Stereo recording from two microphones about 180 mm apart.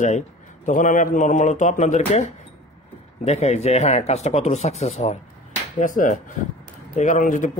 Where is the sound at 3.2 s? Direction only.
40° left (ahead or behind).